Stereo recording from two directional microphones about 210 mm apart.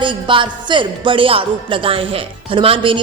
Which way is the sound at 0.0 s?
25° right (ahead or behind).